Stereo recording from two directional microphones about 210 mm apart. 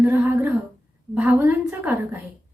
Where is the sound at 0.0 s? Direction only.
10° right (ahead or behind).